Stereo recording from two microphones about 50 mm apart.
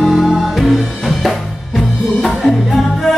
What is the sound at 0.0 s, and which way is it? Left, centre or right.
Music, centre.